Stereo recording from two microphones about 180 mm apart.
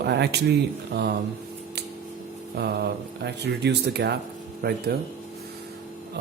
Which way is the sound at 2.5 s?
65° right (ahead or behind).